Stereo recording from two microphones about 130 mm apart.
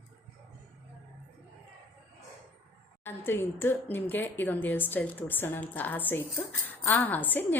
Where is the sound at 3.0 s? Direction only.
15° left (ahead or behind).